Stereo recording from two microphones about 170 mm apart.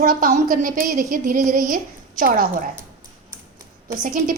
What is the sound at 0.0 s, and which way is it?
A woman's voice, 55° right (ahead or behind).